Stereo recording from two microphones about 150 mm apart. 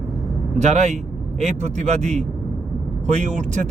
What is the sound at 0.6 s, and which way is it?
Speech, 50° right (ahead or behind).